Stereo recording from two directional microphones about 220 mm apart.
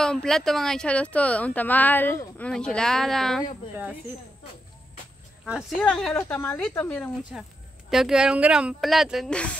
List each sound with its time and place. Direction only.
0.0 s speech: 5° left (ahead or behind)
5.4 s speech: centre (ahead or behind)